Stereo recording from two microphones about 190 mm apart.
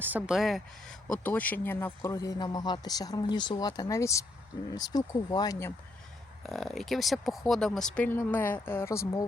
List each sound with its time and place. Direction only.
0.0 s speech: 10° right (ahead or behind); by 5.7 s 15° left (ahead or behind)
6.4 s speech: centre (ahead or behind)